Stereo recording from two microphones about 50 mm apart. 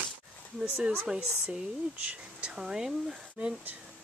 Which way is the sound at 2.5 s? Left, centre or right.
Centre.